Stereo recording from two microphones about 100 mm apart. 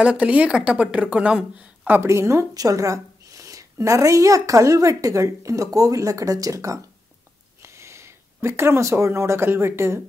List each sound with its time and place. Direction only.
0.0 s a woman's voice: 10° right (ahead or behind)
1.9 s a woman's voice: 25° right (ahead or behind)